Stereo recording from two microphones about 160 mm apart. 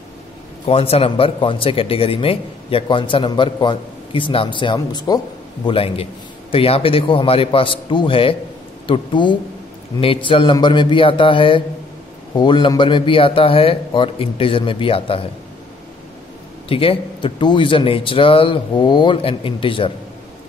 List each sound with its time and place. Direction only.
0.7 s speech: 40° left (ahead or behind)
5.7 s speech: 35° left (ahead or behind)
16.6 s speech: 35° left (ahead or behind)